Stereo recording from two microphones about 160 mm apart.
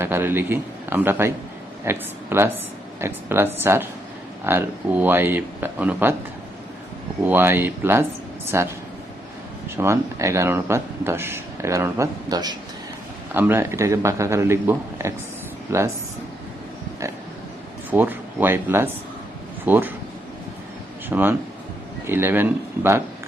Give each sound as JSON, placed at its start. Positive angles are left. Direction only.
{"t": 0.0, "sound": "a man's voice", "side_deg": -15}
{"t": 7.3, "sound": "speech", "side_deg": -15}
{"t": 9.7, "sound": "speech", "side_deg": -15}
{"t": 17.9, "sound": "speech", "side_deg": -10}
{"t": 21.1, "sound": "speech", "side_deg": -10}